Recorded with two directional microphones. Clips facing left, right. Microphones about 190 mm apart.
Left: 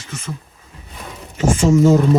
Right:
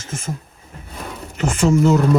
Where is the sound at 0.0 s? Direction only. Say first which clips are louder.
Right 2 dB; 50° right (ahead or behind).